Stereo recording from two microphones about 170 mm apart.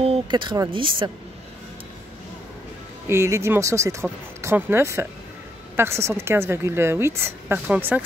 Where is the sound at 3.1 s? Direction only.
15° right (ahead or behind).